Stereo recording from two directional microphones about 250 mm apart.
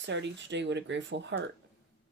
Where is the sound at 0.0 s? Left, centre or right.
Right.